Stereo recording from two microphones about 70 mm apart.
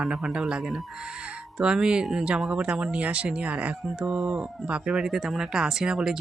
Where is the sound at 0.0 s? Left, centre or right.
Centre.